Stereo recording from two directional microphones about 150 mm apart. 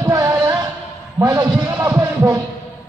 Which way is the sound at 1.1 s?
20° right (ahead or behind).